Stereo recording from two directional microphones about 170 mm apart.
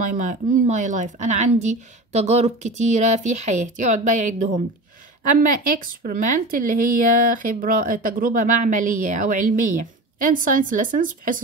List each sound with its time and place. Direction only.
0.0 s speech: 50° right (ahead or behind)